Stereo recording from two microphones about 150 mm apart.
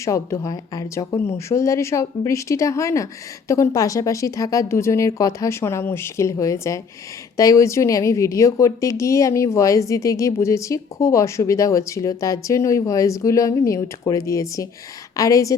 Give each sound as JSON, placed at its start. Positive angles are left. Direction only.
{"t": 0.0, "sound": "speech", "side_deg": 20}